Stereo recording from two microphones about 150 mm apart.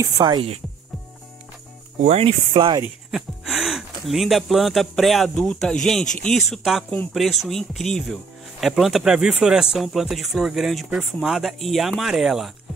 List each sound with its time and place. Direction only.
0.0 s speech: 30° right (ahead or behind)
2.0 s speech: 45° right (ahead or behind)
3.1 s speech: centre (ahead or behind)